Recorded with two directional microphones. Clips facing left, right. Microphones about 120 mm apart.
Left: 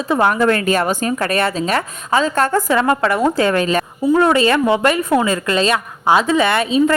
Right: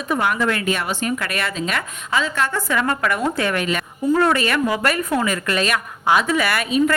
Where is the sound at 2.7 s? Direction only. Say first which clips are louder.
Left 5 dB; 30° left (ahead or behind).